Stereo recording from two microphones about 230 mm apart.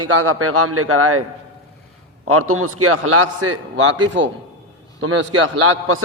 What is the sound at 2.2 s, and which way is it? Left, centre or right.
A man's voice, right.